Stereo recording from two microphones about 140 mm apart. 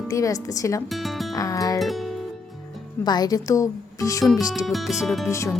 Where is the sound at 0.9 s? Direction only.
Centre (ahead or behind).